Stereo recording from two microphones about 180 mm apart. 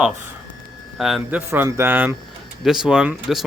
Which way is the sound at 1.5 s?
15° right (ahead or behind).